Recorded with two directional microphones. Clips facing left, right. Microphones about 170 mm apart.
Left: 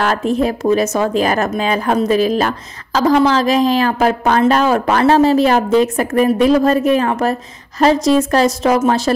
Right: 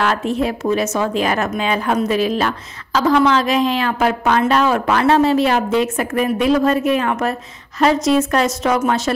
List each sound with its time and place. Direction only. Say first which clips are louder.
0.0 s a woman's voice: left 3 dB; 40° left (ahead or behind)